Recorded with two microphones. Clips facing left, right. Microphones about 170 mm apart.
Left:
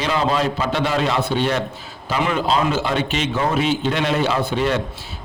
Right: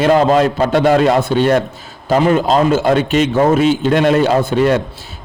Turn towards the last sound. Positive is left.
turn(degrees=-50)  # may be behind; listen again after turning